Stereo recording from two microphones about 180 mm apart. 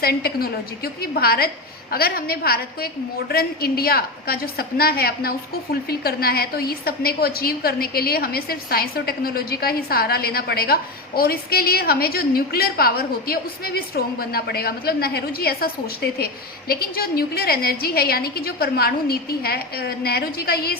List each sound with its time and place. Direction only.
0.0 s a woman's voice: 60° left (ahead or behind)